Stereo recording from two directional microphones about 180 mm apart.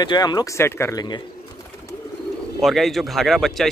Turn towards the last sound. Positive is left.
turn(degrees=0)  # may be behind; listen again after turning